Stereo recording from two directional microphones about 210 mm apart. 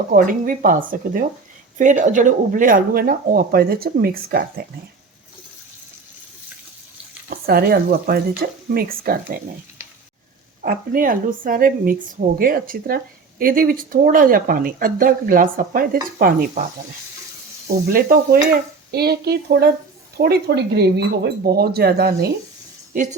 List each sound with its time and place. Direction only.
0.1 s speech: 40° right (ahead or behind)
7.3 s speech: 45° right (ahead or behind)
10.6 s speech: 40° right (ahead or behind)
17.7 s speech: 45° right (ahead or behind)